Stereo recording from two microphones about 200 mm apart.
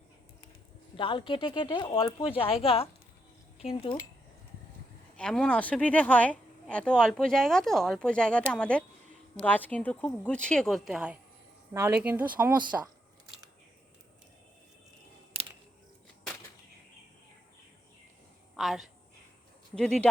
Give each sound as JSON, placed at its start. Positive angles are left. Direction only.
{"t": 0.9, "sound": "speech", "side_deg": 25}
{"t": 5.1, "sound": "speech", "side_deg": 5}
{"t": 18.5, "sound": "a sound", "side_deg": 0}
{"t": 19.7, "sound": "speech", "side_deg": 5}